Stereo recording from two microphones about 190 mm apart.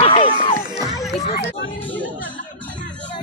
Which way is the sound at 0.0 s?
25° left (ahead or behind).